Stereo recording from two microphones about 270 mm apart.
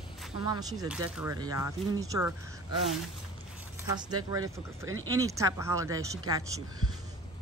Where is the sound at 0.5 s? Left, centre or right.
Centre.